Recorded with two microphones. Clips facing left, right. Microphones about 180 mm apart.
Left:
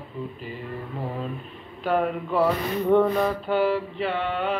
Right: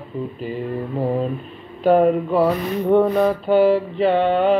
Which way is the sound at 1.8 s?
35° right (ahead or behind).